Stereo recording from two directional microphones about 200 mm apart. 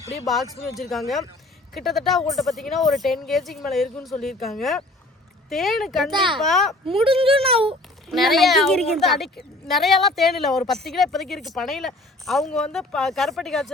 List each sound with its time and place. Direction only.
0.8 s speech: centre (ahead or behind)
6.1 s speech: 25° right (ahead or behind)
6.4 s speech: centre (ahead or behind)
6.8 s speech: 25° right (ahead or behind)
8.0 s speech: centre (ahead or behind)